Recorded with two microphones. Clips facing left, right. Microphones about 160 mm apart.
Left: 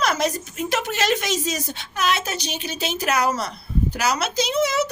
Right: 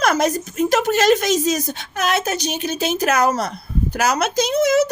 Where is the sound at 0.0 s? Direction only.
45° right (ahead or behind).